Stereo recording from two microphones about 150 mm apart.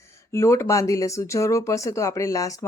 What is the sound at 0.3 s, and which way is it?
Speech, 20° left (ahead or behind).